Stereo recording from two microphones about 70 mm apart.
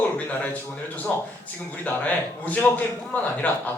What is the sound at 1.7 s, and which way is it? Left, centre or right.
A man's voice, left.